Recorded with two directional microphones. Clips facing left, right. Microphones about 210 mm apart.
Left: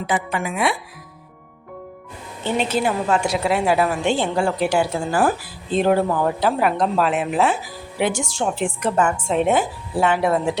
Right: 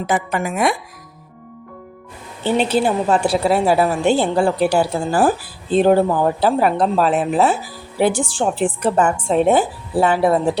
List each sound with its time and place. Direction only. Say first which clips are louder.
0.1 s speech: right 3 dB; 45° right (ahead or behind)
2.4 s a woman's voice: right 4 dB; 30° right (ahead or behind)